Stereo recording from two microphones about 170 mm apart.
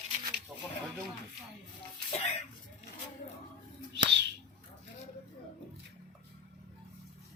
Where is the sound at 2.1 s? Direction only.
40° left (ahead or behind).